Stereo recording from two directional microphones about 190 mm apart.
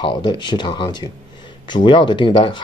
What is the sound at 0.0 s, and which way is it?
Speech, 25° left (ahead or behind).